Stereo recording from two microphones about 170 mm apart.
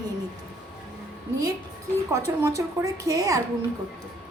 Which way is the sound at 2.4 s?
20° right (ahead or behind).